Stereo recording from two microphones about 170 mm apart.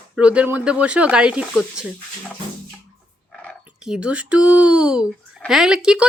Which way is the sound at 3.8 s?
5° right (ahead or behind).